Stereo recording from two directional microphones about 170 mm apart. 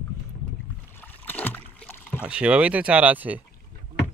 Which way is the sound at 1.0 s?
10° left (ahead or behind).